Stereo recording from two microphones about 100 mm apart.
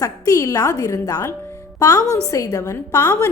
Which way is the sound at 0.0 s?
35° left (ahead or behind).